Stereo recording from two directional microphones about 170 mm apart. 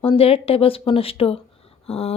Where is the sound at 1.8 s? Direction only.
35° left (ahead or behind).